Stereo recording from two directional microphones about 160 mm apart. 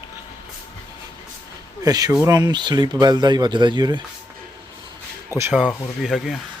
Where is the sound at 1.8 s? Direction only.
20° right (ahead or behind).